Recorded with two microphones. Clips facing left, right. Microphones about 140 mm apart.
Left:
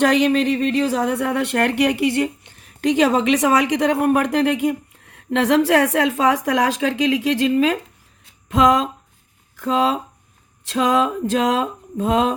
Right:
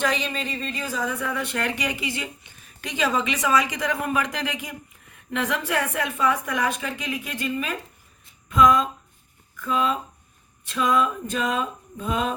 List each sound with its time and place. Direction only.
0.0 s speech: 65° left (ahead or behind)
8.2 s a sound: 80° left
9.6 s speech: 80° left